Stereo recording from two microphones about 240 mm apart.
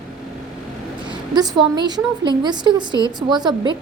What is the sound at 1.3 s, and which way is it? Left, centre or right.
A woman's voice, centre.